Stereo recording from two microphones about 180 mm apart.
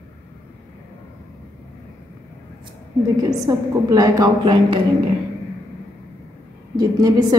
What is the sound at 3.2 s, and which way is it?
A woman's voice, 20° right (ahead or behind).